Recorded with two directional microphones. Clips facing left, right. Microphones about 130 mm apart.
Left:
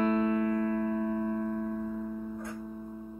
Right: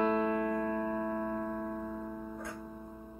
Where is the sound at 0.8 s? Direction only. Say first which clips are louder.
Left 3 dB; 45° right (ahead or behind).